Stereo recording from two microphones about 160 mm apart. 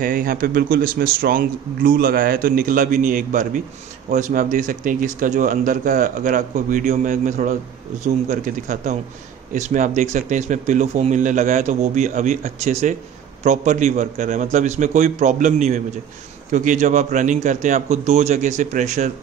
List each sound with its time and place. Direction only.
0.0 s speech: 60° right (ahead or behind)